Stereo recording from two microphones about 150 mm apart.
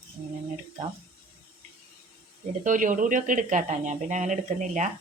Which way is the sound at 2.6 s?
60° right (ahead or behind).